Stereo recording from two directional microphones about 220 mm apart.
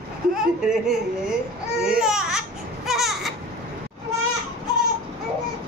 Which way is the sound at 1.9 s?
5° right (ahead or behind).